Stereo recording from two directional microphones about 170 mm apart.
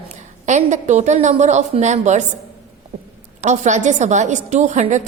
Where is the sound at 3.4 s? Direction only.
45° right (ahead or behind).